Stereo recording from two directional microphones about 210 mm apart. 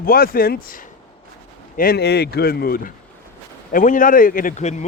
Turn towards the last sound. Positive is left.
turn(degrees=35)  # may be behind; listen again after turning